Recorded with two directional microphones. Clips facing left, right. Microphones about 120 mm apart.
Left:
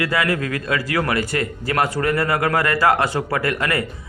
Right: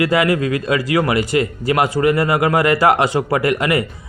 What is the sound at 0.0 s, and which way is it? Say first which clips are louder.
A man's voice: right 5 dB; 20° right (ahead or behind).